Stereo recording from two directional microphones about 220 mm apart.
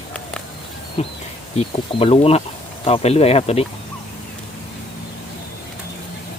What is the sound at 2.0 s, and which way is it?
Speech, 25° left (ahead or behind).